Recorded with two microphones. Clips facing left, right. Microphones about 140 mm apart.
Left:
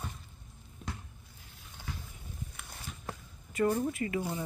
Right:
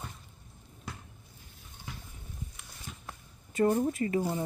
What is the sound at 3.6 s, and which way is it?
Speech, 30° right (ahead or behind).